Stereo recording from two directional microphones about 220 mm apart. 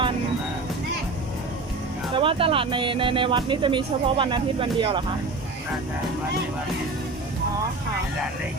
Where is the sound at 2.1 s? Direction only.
25° right (ahead or behind).